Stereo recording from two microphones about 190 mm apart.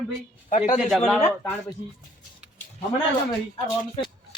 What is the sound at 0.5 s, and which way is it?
Speech, 40° left (ahead or behind).